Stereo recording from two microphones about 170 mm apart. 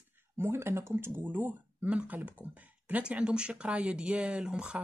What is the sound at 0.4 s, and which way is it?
Speech, 15° right (ahead or behind).